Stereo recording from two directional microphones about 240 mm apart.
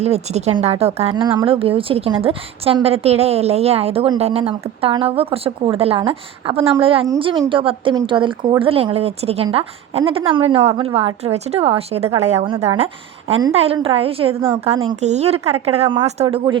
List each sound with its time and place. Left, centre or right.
0.0 s speech: right